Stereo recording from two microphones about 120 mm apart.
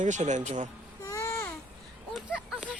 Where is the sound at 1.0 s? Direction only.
25° left (ahead or behind).